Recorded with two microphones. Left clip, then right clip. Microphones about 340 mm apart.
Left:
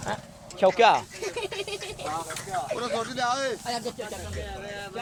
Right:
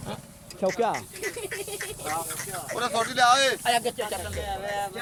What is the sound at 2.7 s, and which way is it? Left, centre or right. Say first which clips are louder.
Speech: right 7 dB; right.